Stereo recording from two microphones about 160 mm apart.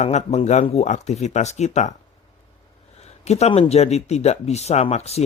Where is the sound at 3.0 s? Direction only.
40° left (ahead or behind).